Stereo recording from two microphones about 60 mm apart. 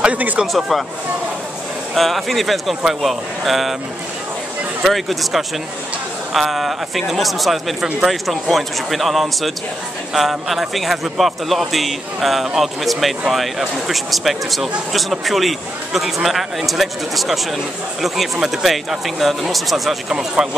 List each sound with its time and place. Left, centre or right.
0.0 s speech: right
0.5 s speech: centre
2.0 s speech: centre
4.8 s speech: centre